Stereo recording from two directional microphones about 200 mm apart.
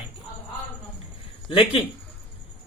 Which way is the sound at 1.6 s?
30° left (ahead or behind).